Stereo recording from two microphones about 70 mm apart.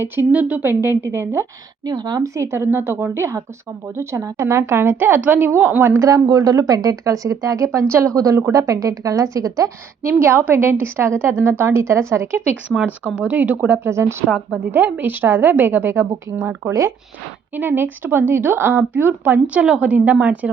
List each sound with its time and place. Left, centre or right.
0.3 s speech: right
1.0 s a woman's voice: right
1.8 s a woman's voice: right
2.3 s a woman's voice: right
6.0 s a woman's voice: right
13.1 s speech: right
13.8 s a woman's voice: right
14.8 s a woman's voice: right
17.5 s speech: right